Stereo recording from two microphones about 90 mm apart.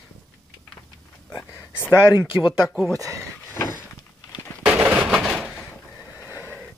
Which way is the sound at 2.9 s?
40° right (ahead or behind).